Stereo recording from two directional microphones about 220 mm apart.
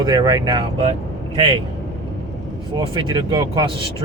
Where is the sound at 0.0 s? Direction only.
20° right (ahead or behind).